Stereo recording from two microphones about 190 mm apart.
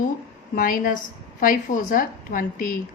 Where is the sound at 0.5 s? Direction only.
45° left (ahead or behind).